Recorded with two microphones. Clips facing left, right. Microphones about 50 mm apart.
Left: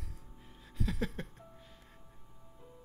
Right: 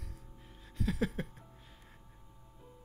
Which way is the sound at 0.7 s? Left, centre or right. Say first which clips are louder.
Right 3 dB; centre.